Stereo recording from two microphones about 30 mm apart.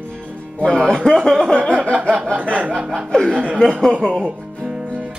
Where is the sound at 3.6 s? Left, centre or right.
Left.